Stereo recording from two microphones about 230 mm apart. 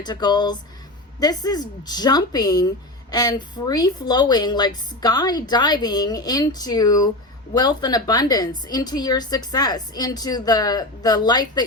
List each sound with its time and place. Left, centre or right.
0.0 s a woman's voice: centre